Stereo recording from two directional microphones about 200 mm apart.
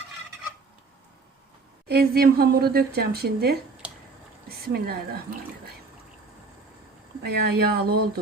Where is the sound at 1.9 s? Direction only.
50° right (ahead or behind).